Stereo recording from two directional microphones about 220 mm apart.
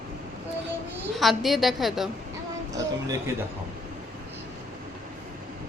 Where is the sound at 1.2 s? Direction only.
Centre (ahead or behind).